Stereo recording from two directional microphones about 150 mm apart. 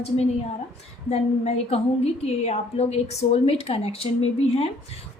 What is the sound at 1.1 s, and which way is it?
A woman's voice, 45° left (ahead or behind).